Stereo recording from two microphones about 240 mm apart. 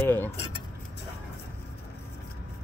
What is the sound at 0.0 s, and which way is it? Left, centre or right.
Speech, centre.